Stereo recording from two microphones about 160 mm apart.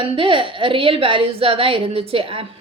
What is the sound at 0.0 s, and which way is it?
A woman's voice, 30° right (ahead or behind).